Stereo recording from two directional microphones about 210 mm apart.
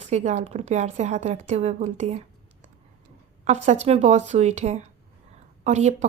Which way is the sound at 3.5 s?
35° right (ahead or behind).